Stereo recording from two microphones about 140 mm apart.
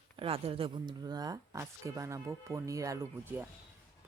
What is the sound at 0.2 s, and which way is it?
Speech, 45° right (ahead or behind).